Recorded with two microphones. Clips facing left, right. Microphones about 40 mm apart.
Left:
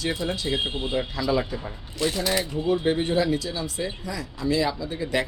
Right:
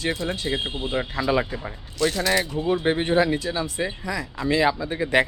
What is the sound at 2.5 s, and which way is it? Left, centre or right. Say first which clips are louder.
Speech: right 1 dB; right.